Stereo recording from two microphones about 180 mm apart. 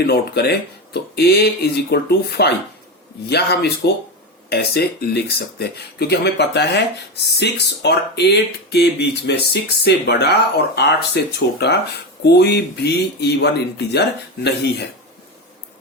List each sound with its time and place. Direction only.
0.0 s speech: 60° left (ahead or behind)
12.2 s speech: 65° left (ahead or behind)